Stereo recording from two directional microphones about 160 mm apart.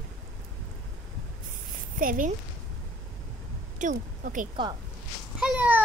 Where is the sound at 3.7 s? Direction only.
55° right (ahead or behind).